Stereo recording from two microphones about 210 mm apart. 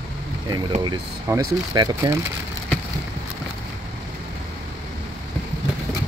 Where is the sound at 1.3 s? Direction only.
15° right (ahead or behind).